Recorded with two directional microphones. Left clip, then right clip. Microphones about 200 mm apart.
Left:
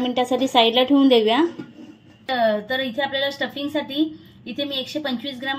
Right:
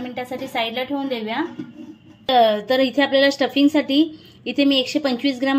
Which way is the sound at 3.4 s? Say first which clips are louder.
Right 7 dB; 40° right (ahead or behind).